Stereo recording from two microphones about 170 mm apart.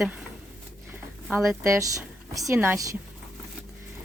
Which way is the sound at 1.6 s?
20° right (ahead or behind).